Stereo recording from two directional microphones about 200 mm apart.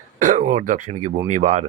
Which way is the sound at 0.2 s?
35° right (ahead or behind).